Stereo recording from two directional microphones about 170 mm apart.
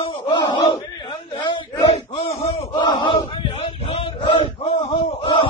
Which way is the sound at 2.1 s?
35° left (ahead or behind).